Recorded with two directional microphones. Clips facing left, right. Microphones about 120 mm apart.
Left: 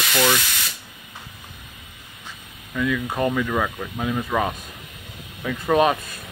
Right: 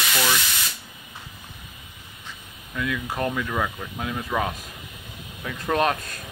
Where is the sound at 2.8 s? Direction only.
Centre (ahead or behind).